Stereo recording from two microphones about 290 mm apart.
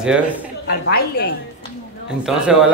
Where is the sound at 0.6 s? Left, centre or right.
Left.